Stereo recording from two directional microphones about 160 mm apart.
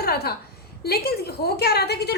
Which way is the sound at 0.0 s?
80° left.